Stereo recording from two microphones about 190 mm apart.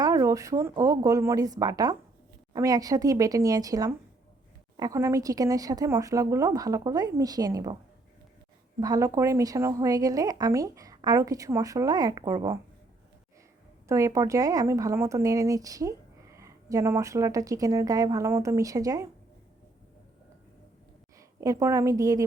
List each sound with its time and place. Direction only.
0.0 s a woman's voice: 15° right (ahead or behind)
8.8 s a woman's voice: 20° right (ahead or behind)
13.8 s a woman's voice: 15° right (ahead or behind)
21.2 s a woman's voice: 15° right (ahead or behind)